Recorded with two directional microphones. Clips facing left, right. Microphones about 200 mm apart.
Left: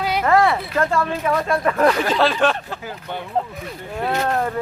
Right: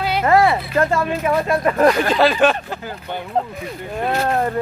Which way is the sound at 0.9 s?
10° right (ahead or behind).